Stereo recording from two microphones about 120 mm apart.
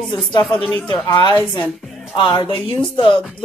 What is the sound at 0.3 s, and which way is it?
Speech, 40° left (ahead or behind).